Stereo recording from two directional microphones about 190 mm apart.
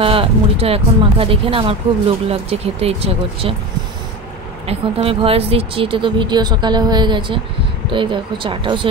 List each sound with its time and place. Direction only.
0.0 s speech: 30° right (ahead or behind)
4.6 s speech: 30° right (ahead or behind)